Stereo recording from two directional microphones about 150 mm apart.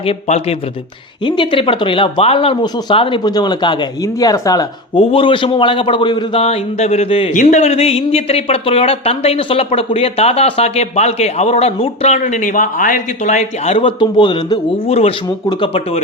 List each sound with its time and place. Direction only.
0.0 s speech: 45° left (ahead or behind)
1.2 s speech: 35° left (ahead or behind)
4.9 s speech: 35° left (ahead or behind)
6.4 s speech: 45° left (ahead or behind)